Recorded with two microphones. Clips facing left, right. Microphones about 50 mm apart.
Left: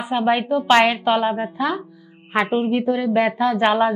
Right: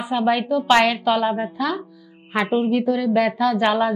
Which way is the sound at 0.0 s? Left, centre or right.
Left.